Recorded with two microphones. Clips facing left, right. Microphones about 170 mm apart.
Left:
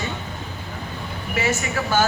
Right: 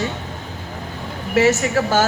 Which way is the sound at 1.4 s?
90° right.